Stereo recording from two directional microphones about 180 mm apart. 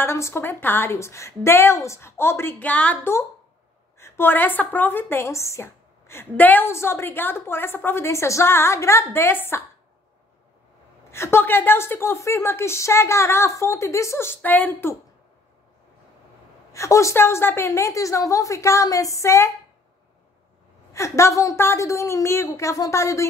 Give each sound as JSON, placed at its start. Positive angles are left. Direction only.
{"t": 0.0, "sound": "a woman's voice", "side_deg": 15}
{"t": 11.1, "sound": "a woman's voice", "side_deg": 15}
{"t": 16.7, "sound": "a woman's voice", "side_deg": 15}
{"t": 20.9, "sound": "a woman's voice", "side_deg": 15}